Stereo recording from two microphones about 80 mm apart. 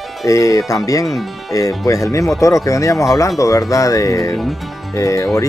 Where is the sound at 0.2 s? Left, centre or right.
Left.